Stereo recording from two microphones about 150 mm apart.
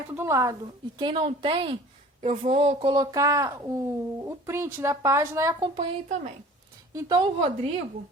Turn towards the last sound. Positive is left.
turn(degrees=-40)  # may be behind; listen again after turning